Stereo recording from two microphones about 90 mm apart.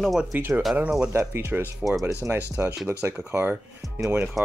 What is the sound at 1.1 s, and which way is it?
Speech, 30° right (ahead or behind).